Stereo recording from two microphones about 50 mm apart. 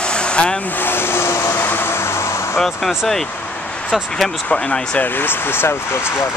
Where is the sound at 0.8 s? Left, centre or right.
Left.